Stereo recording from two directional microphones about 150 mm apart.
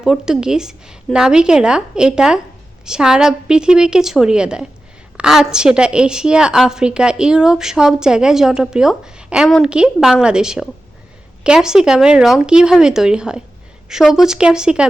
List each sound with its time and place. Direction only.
0.0 s a woman's voice: 5° right (ahead or behind)